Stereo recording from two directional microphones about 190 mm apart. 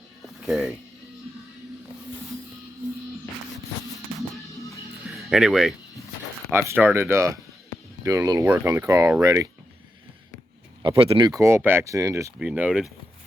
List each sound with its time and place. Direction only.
0.4 s speech: centre (ahead or behind)
5.0 s music: centre (ahead or behind)
6.5 s speech: 15° right (ahead or behind)
10.8 s speech: 30° right (ahead or behind)
11.3 s speech: 15° right (ahead or behind)